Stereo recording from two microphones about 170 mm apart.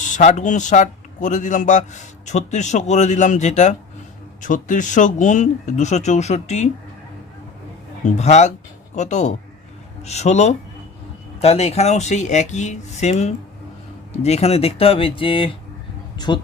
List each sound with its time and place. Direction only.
0.0 s a man's voice: 45° left (ahead or behind)
8.0 s a man's voice: 40° left (ahead or behind); by 16.4 s 25° left (ahead or behind)